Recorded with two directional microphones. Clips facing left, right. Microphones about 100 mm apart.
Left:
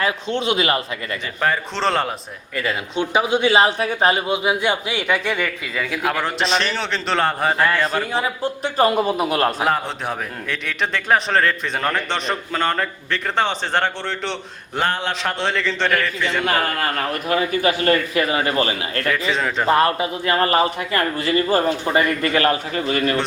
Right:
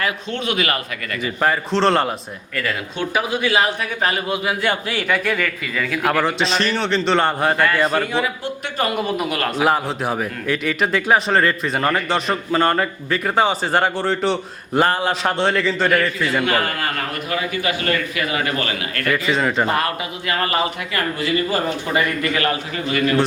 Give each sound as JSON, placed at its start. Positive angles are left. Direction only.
{"t": 0.0, "sound": "speech", "side_deg": 30}
{"t": 1.4, "sound": "a man's voice", "side_deg": 0}
{"t": 2.6, "sound": "speech", "side_deg": 20}
{"t": 6.1, "sound": "a man's voice", "side_deg": 0}
{"t": 8.1, "sound": "a man's voice", "side_deg": 35}
{"t": 9.6, "sound": "a man's voice", "side_deg": -5}
{"t": 17.2, "sound": "a man's voice", "side_deg": 35}
{"t": 19.1, "sound": "a man's voice", "side_deg": 0}
{"t": 19.6, "sound": "a man's voice", "side_deg": 30}